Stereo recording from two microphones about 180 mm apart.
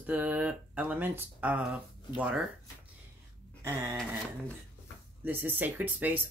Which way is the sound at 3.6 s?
20° right (ahead or behind).